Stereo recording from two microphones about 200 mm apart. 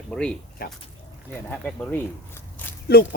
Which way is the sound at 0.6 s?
50° left (ahead or behind).